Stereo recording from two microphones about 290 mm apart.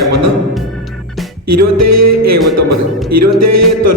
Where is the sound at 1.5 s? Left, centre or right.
Right.